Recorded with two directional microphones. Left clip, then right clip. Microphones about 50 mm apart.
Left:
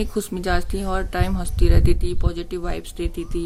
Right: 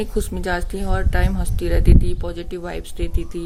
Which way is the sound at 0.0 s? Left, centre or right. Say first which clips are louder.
Right 1 dB; left.